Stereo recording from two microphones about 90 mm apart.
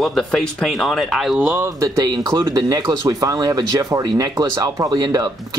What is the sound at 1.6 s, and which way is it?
Speech, 35° right (ahead or behind).